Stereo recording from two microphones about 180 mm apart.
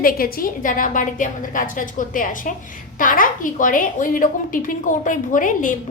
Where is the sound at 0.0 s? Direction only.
55° left (ahead or behind).